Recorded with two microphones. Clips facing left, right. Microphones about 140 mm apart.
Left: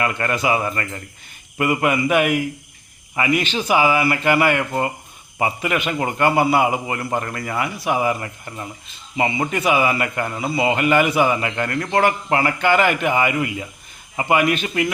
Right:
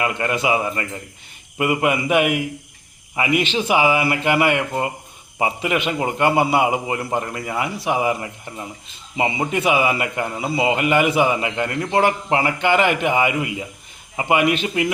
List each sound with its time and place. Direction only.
0.0 s a man's voice: 15° right (ahead or behind)